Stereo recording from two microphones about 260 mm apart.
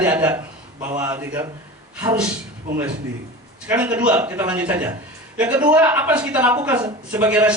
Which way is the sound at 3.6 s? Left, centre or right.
Centre.